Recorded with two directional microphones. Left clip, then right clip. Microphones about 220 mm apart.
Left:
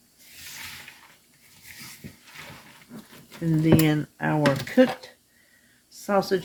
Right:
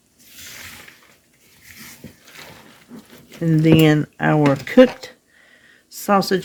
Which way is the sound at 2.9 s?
Centre (ahead or behind).